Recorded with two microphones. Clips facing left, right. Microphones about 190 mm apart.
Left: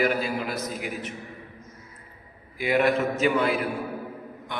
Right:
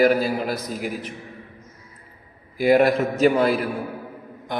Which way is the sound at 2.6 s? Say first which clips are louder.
Right 5 dB; 40° right (ahead or behind).